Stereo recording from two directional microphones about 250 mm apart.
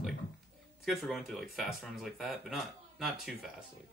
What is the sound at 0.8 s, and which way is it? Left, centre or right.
Speech, centre.